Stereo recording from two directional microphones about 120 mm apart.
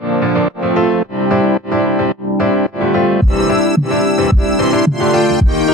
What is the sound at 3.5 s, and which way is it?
Music, centre (ahead or behind).